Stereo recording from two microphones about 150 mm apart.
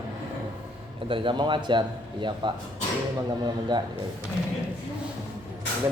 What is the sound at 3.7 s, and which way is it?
Speech, 30° right (ahead or behind).